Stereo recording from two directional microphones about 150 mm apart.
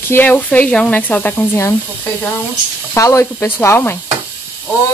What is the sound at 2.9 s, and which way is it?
Speech, 20° left (ahead or behind).